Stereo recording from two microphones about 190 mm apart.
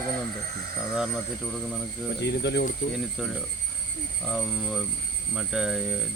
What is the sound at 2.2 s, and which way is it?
Speech, 60° left (ahead or behind).